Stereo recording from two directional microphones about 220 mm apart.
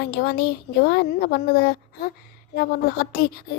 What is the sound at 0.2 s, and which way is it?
A woman's voice, 45° left (ahead or behind).